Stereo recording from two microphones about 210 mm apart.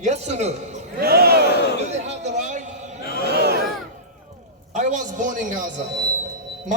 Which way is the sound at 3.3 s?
50° right (ahead or behind).